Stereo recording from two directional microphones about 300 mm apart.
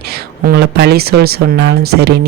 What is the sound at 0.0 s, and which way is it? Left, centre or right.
Speech, right.